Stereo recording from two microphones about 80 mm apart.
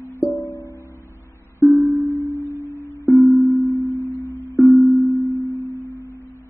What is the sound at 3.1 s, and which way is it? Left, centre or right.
Music, centre.